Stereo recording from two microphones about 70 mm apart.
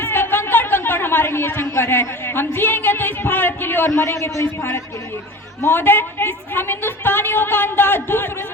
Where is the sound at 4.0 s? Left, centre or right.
Left.